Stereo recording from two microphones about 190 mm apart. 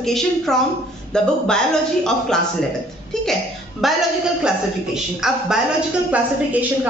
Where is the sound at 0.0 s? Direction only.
Centre (ahead or behind).